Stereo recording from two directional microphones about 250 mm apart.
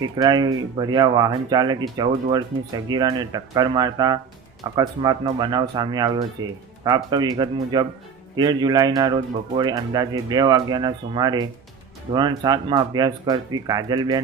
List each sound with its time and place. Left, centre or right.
0.0 s speech: centre